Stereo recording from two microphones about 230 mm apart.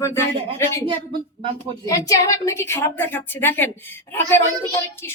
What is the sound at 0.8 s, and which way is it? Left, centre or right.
Speech, right.